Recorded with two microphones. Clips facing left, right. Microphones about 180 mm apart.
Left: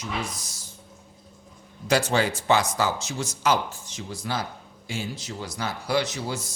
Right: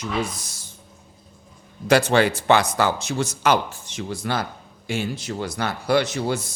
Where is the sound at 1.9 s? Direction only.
65° right (ahead or behind).